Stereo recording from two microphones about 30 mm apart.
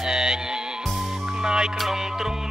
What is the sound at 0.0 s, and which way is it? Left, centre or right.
Music, right.